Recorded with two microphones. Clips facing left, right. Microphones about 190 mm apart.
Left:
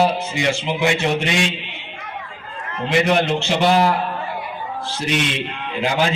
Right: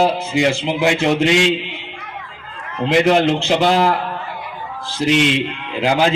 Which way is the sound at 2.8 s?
90° right.